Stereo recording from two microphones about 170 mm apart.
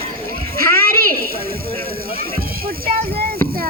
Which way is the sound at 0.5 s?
60° right (ahead or behind).